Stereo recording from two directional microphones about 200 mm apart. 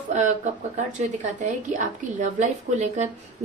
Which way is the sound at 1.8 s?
40° right (ahead or behind).